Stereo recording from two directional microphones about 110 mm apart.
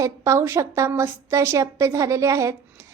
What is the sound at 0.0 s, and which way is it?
Speech, 30° right (ahead or behind).